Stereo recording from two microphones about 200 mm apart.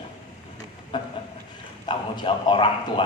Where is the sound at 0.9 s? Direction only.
25° left (ahead or behind).